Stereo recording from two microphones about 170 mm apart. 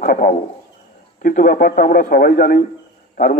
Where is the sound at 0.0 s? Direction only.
55° left (ahead or behind).